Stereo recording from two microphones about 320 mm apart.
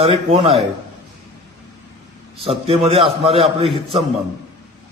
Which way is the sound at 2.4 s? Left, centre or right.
Centre.